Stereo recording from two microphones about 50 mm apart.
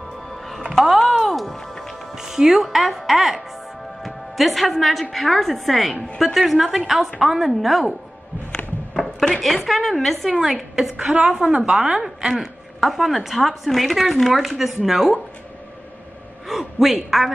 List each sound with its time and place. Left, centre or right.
0.3 s music: centre
2.1 s a woman's voice: centre
9.2 s a woman's voice: centre
11.1 s a woman's voice: centre
16.4 s a man's voice: centre